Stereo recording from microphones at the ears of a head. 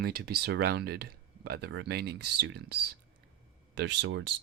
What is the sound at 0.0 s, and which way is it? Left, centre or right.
Speech, right.